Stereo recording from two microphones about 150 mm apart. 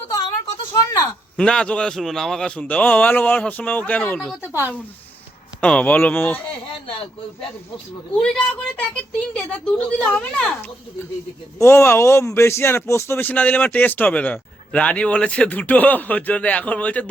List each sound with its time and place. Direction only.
0.1 s a sound: 25° left (ahead or behind)
1.4 s speech: 5° left (ahead or behind)
5.5 s speech: 10° left (ahead or behind)
8.1 s speech: 5° left (ahead or behind)
11.6 s speech: 15° left (ahead or behind)